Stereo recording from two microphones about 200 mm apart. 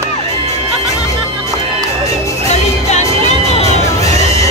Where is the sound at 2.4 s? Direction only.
35° left (ahead or behind).